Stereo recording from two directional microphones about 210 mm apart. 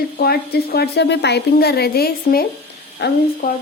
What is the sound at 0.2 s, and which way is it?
Speech, 50° left (ahead or behind).